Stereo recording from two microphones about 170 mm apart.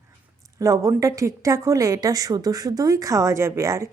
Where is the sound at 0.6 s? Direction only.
20° right (ahead or behind).